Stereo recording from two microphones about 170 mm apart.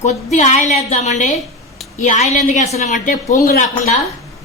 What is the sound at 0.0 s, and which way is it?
A woman's voice, 40° left (ahead or behind).